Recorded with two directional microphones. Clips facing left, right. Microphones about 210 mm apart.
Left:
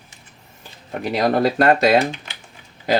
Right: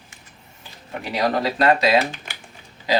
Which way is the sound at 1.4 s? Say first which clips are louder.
Left 3 dB; 50° left (ahead or behind).